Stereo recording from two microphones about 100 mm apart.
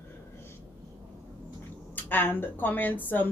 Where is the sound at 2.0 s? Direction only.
20° left (ahead or behind).